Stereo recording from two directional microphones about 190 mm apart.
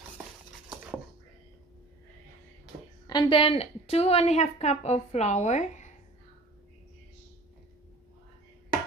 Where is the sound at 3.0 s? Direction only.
25° left (ahead or behind).